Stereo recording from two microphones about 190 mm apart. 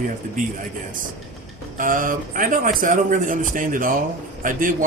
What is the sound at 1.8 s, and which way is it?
Speech, 45° right (ahead or behind).